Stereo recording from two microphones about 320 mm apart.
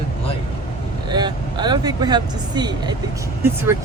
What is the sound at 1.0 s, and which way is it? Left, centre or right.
A woman's voice, centre.